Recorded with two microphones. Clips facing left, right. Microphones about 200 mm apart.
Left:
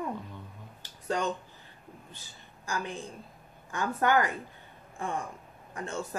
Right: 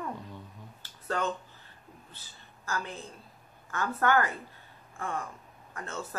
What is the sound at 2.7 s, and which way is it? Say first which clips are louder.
A woman's voice: left 2 dB; 15° left (ahead or behind).